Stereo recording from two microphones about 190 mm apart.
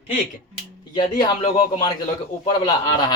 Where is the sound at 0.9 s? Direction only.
25° left (ahead or behind).